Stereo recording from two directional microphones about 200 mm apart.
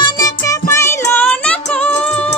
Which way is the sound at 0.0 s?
15° left (ahead or behind).